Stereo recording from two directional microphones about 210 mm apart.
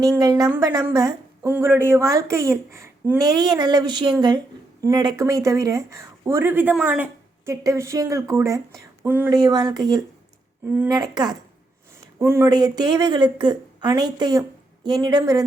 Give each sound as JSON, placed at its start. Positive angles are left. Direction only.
{"t": 0.0, "sound": "speech", "side_deg": -15}